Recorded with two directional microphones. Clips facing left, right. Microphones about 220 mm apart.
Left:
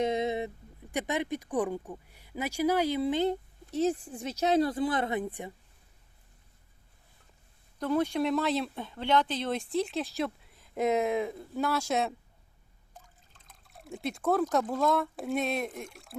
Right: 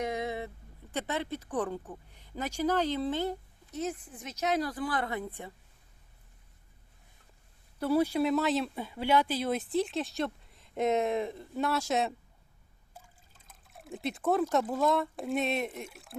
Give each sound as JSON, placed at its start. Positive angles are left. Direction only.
{"t": 0.0, "sound": "speech", "side_deg": 20}
{"t": 3.7, "sound": "speech", "side_deg": 30}
{"t": 7.8, "sound": "speech", "side_deg": -10}